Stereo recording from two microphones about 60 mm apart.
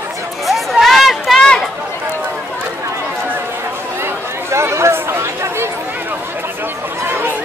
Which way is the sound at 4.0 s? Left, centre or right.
Right.